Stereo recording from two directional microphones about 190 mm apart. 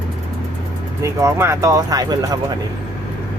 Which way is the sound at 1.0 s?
15° right (ahead or behind).